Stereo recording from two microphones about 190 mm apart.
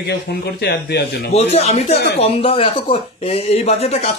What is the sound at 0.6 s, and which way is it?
Speech, 60° left (ahead or behind).